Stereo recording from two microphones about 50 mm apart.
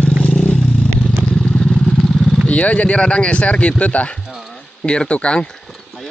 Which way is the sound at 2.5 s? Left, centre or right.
Left.